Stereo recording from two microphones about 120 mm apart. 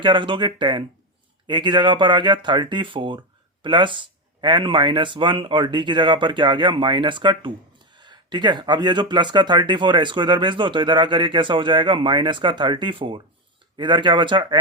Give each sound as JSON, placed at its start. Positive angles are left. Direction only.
{"t": 0.0, "sound": "speech", "side_deg": -40}